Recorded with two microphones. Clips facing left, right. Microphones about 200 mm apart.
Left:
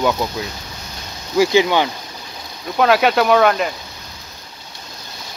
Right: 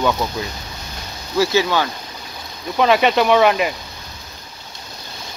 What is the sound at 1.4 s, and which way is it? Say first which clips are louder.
Speech: left 3 dB; 15° left (ahead or behind).